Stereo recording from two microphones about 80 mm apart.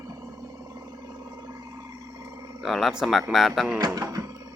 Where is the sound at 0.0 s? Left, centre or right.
Right.